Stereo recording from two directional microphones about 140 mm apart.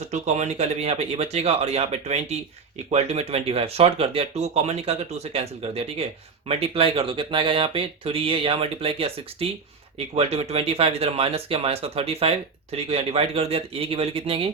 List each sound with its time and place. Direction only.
0.1 s speech: 55° right (ahead or behind)